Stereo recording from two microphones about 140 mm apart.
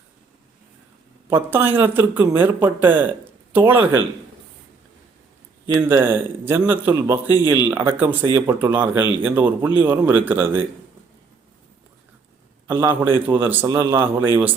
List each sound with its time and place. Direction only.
1.3 s a man's voice: 15° right (ahead or behind)
5.7 s a man's voice: 15° right (ahead or behind)
12.6 s a man's voice: 15° right (ahead or behind)